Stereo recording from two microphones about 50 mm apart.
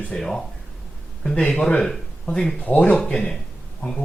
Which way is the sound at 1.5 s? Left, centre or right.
Centre.